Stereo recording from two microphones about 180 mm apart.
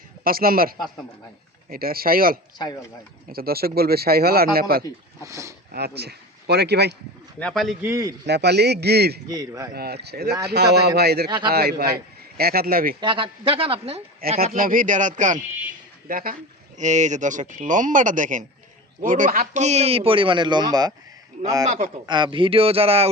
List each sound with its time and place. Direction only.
0.3 s speech: 55° right (ahead or behind)
5.3 s a man's voice: 15° right (ahead or behind)
5.7 s speech: 65° right (ahead or behind)
7.3 s speech: 5° left (ahead or behind)
7.8 s a man's voice: 15° right (ahead or behind)
8.3 s a man's voice: 70° right (ahead or behind)
9.3 s a woman's voice: 20° right (ahead or behind)
9.7 s speech: 60° right (ahead or behind)
11.3 s a woman's voice: 25° right (ahead or behind)
11.5 s speech: 60° right (ahead or behind)
13.0 s a woman's voice: 25° right (ahead or behind)
14.4 s a man's voice: 50° right (ahead or behind); by 20.9 s 20° right (ahead or behind)
21.7 s a man's voice: 40° right (ahead or behind)
22.0 s a man's voice: 25° right (ahead or behind)